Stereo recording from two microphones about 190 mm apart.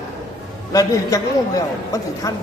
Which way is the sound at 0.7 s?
15° left (ahead or behind).